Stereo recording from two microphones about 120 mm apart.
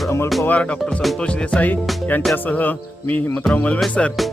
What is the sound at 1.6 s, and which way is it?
Speech, 15° left (ahead or behind).